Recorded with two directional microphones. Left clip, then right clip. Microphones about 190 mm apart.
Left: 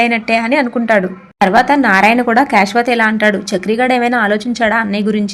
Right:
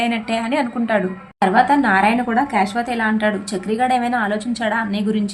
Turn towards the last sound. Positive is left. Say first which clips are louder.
# left 6 dB
turn(degrees=35)  # may be behind; listen again after turning